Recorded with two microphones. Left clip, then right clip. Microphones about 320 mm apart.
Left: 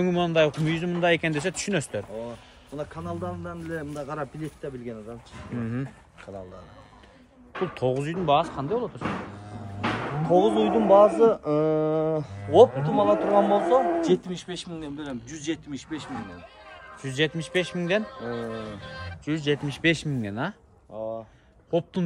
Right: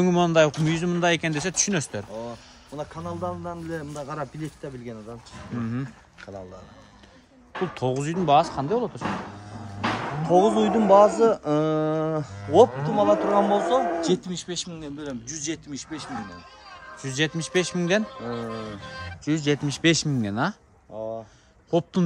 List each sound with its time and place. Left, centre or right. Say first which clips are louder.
0.0 s speech: right 3 dB; centre
2.7 s speech: even; right
5.6 s speech: right 1 dB; centre
7.5 s speech: right 1 dB; right
8.0 s speech: right 5 dB; centre
9.8 s speech: right 1 dB; right
13.4 s speech: left 1 dB; right
14.0 s speech: left 1 dB; centre
18.0 s speech: right 1 dB; right
19.2 s speech: right 2 dB; centre
20.9 s speech: right 1 dB; right
21.6 s speech: right 2 dB; centre